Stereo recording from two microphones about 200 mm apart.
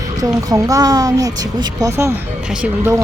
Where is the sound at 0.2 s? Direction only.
15° right (ahead or behind).